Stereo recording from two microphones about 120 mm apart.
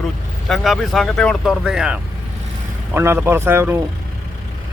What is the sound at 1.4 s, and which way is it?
Speech, 5° right (ahead or behind).